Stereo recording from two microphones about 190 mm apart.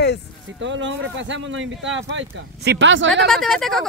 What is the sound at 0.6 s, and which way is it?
Speech, 75° right (ahead or behind).